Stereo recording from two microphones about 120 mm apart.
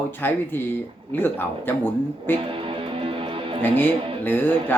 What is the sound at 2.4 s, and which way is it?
Music, 45° right (ahead or behind).